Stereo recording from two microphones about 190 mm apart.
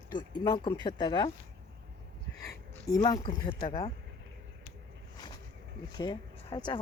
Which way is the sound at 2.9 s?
20° left (ahead or behind).